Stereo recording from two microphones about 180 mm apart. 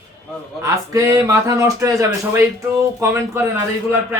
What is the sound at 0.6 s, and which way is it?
A man's voice, 20° right (ahead or behind).